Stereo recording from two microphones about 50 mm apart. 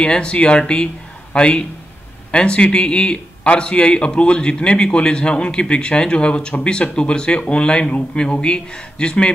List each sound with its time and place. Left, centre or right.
0.0 s a man's voice: centre